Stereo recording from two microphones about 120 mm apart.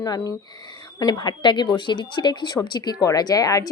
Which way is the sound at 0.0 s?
30° left (ahead or behind).